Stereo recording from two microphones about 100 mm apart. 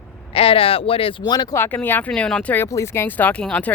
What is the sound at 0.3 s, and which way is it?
Speech, 70° left (ahead or behind).